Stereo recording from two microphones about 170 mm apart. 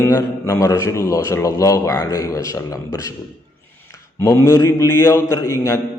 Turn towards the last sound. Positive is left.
turn(degrees=15)  # may be behind; listen again after turning